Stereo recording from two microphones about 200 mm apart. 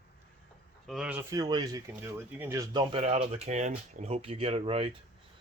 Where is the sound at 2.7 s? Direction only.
30° right (ahead or behind).